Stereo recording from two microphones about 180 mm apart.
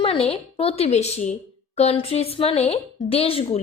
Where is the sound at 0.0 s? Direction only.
30° left (ahead or behind).